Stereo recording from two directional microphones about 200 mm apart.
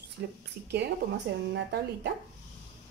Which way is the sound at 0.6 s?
50° right (ahead or behind).